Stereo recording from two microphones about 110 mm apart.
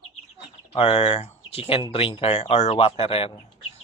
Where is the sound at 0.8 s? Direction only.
65° left (ahead or behind).